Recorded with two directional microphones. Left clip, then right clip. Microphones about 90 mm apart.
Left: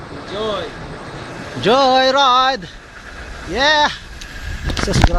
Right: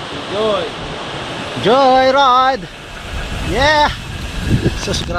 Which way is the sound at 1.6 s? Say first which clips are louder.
Right 2 dB; 30° left (ahead or behind).